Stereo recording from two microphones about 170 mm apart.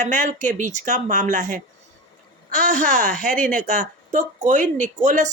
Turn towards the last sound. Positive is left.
turn(degrees=-50)  # may be behind; listen again after turning